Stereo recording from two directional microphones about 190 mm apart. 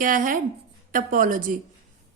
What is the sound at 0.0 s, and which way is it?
A woman's voice, 45° right (ahead or behind).